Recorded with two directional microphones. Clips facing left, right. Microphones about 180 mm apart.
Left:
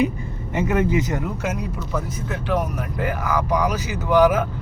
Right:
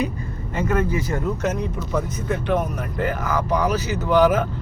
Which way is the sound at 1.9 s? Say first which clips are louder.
Right 4 dB; 5° left (ahead or behind).